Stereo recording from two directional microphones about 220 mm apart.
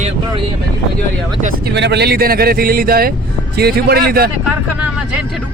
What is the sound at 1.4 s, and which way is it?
Speech, 50° right (ahead or behind).